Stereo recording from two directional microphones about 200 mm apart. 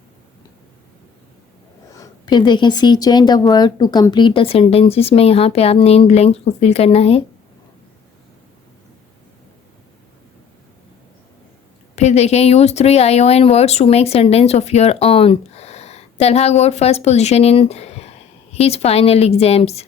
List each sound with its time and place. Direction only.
1.9 s speech: 20° left (ahead or behind)
11.9 s speech: 30° left (ahead or behind)